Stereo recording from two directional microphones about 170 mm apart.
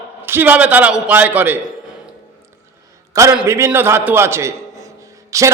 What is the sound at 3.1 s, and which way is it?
A man's voice, 20° right (ahead or behind).